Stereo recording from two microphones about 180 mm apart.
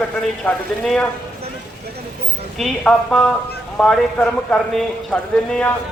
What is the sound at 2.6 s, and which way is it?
Speech, 5° left (ahead or behind).